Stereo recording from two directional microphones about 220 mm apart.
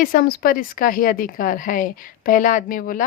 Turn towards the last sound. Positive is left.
turn(degrees=40)  # may be behind; listen again after turning